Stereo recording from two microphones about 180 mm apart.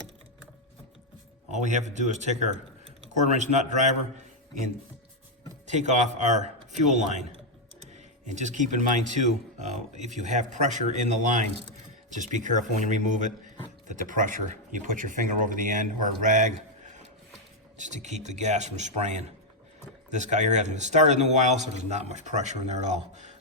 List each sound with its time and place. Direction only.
1.5 s a man's voice: 40° right (ahead or behind)
5.6 s a man's voice: 40° right (ahead or behind)